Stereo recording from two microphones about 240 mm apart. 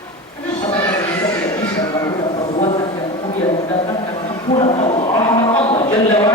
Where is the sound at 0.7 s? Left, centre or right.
Centre.